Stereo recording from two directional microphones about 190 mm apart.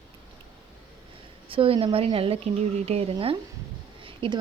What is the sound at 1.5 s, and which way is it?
Speech, 30° right (ahead or behind).